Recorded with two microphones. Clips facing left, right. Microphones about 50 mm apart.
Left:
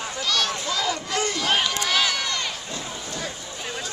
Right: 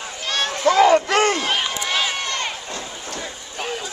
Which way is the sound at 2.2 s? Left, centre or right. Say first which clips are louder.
Right 2 dB; right.